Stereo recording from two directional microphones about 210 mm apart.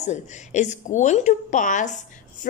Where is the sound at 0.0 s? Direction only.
35° left (ahead or behind).